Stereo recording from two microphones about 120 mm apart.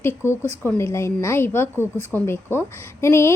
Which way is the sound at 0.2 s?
20° left (ahead or behind).